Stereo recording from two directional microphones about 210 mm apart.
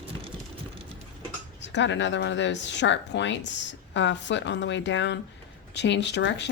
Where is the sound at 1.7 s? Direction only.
60° left (ahead or behind).